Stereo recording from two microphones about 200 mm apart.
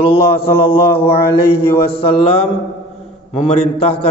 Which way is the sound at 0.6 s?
25° left (ahead or behind).